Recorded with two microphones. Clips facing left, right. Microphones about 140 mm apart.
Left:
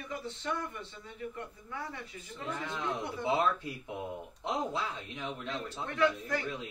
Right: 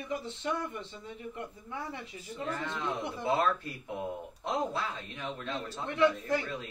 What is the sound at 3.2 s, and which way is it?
A man's voice, 15° left (ahead or behind).